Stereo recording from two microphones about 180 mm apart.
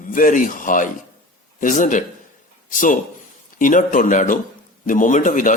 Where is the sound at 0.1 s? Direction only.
50° left (ahead or behind).